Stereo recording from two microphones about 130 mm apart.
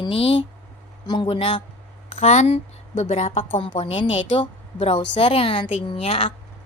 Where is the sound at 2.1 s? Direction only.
60° left (ahead or behind).